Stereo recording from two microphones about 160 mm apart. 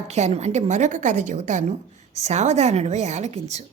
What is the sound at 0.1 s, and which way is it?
A woman's voice, 45° right (ahead or behind).